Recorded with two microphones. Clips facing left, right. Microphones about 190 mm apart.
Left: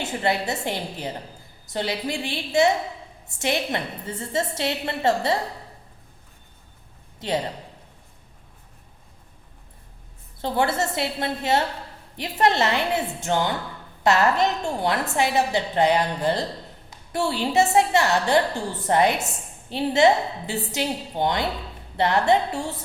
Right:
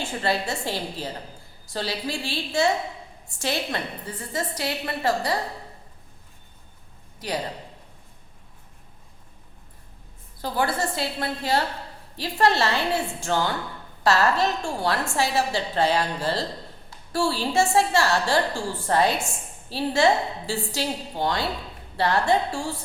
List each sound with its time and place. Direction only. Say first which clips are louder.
0.0 s a woman's voice: left 1 dB; 20° left (ahead or behind)
7.2 s a woman's voice: left 4 dB; 25° left (ahead or behind)
10.4 s a woman's voice: left 2 dB; 25° left (ahead or behind)